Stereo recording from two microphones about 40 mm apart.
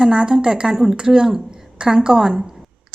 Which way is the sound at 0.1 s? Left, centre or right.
Right.